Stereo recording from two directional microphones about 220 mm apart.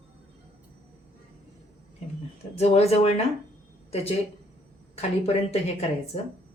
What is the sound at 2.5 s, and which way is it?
Speech, 30° left (ahead or behind).